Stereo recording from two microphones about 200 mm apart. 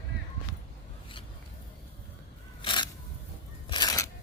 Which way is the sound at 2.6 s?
25° left (ahead or behind).